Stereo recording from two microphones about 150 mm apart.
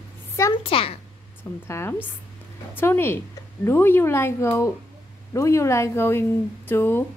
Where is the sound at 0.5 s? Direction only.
40° left (ahead or behind).